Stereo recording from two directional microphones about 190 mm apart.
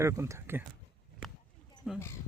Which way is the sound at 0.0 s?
15° right (ahead or behind).